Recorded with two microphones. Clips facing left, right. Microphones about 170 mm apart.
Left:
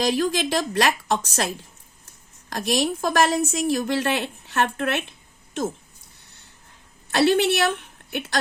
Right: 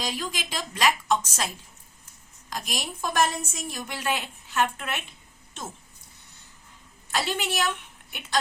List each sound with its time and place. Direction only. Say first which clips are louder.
0.0 s a woman's voice: left 11 dB; 70° left (ahead or behind)
2.5 s a woman's voice: left 11 dB; 70° left (ahead or behind)
7.1 s a woman's voice: left 10 dB; 75° left (ahead or behind)